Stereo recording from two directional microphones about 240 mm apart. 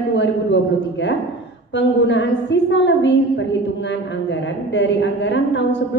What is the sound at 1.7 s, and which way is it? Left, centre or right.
A woman's voice, left.